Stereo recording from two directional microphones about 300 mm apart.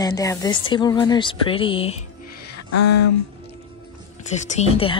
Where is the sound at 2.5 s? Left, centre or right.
Left.